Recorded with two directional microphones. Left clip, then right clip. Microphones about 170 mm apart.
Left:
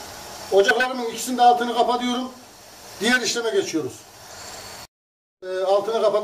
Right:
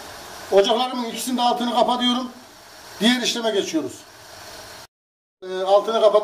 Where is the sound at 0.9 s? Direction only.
65° right (ahead or behind).